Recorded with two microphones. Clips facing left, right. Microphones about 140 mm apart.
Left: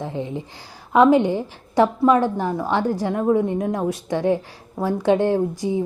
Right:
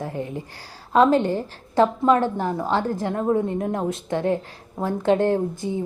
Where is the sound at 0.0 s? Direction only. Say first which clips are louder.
Left 2 dB; 20° left (ahead or behind).